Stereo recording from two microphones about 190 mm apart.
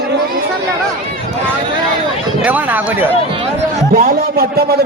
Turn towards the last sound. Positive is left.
turn(degrees=-55)  # may be behind; listen again after turning